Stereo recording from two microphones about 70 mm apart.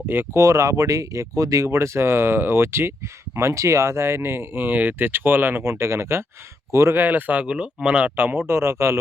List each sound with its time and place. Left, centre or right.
0.3 s speech: right
6.9 s speech: right
8.1 s speech: right